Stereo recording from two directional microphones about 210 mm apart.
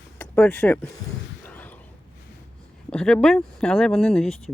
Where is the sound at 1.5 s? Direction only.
5° left (ahead or behind).